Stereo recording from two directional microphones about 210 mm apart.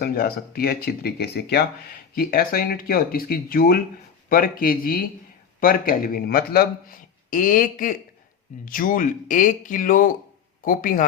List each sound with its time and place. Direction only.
0.0 s speech: 45° left (ahead or behind)